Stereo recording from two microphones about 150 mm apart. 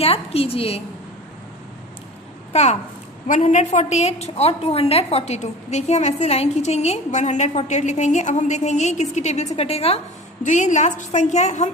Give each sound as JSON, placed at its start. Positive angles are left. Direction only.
{"t": 0.0, "sound": "a woman's voice", "side_deg": 40}
{"t": 2.5, "sound": "a child's voice", "side_deg": 45}
{"t": 10.4, "sound": "a woman's voice", "side_deg": 55}